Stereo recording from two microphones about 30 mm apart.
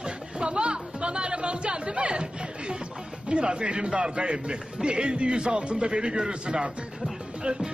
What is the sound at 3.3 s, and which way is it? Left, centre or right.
A man's voice, right.